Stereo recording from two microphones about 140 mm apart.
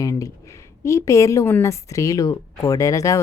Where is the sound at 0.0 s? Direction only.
20° left (ahead or behind).